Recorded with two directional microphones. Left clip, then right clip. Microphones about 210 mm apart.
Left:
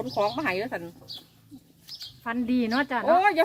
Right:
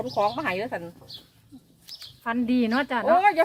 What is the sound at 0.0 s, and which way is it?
Speech, 5° right (ahead or behind).